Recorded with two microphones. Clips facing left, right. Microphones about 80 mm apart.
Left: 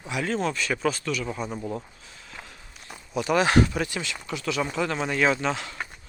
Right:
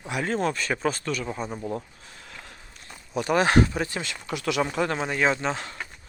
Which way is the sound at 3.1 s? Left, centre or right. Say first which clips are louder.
Even; right.